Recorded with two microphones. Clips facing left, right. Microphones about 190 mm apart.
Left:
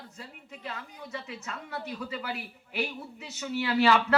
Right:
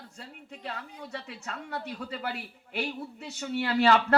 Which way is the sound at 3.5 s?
55° right (ahead or behind).